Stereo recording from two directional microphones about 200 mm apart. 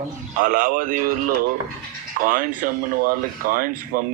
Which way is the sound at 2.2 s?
45° right (ahead or behind).